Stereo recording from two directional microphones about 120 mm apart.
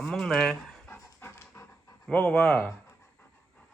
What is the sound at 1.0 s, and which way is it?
Dog, 25° left (ahead or behind).